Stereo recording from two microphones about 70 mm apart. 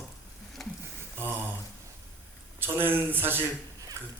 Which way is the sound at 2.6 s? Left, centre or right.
Right.